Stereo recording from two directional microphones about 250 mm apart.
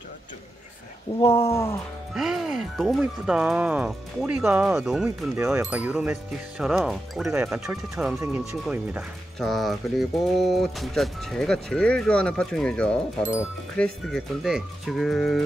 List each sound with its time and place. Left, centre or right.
1.2 s speech: left
1.5 s speech: centre
2.1 s speech: centre